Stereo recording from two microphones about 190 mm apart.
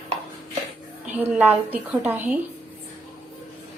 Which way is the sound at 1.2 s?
10° right (ahead or behind).